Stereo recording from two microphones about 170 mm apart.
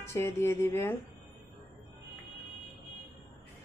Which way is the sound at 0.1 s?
15° left (ahead or behind).